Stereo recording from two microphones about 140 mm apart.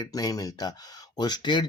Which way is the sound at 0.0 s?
25° left (ahead or behind).